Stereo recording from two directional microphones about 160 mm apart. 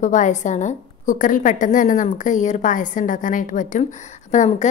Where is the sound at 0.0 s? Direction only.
50° left (ahead or behind).